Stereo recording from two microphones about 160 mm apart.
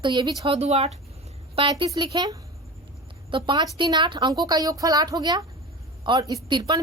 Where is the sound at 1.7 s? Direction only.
25° right (ahead or behind).